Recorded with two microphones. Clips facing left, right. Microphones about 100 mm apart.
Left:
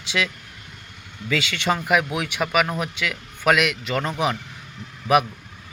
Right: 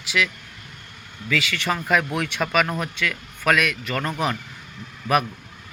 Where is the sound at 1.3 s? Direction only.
25° left (ahead or behind).